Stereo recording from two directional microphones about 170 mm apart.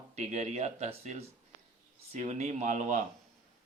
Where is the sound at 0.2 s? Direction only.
40° right (ahead or behind).